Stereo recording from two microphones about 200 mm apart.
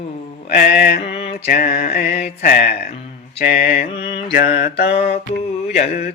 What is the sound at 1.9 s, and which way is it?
Mantra, 50° left (ahead or behind).